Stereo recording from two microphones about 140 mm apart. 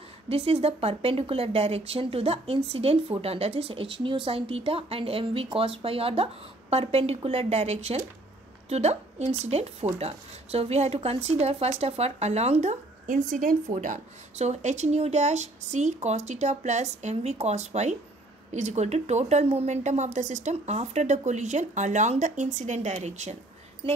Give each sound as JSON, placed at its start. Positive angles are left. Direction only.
{"t": 0.3, "sound": "a woman's voice", "side_deg": -45}